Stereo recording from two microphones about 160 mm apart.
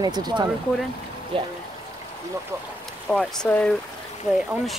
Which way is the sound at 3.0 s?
5° left (ahead or behind).